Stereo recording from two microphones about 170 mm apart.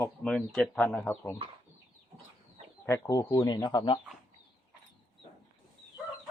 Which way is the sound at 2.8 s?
20° left (ahead or behind).